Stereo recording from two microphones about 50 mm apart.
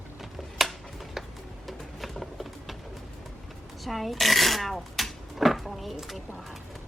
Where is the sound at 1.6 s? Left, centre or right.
Centre.